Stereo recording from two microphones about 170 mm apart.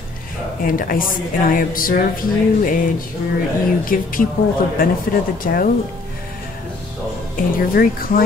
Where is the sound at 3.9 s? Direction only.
55° left (ahead or behind).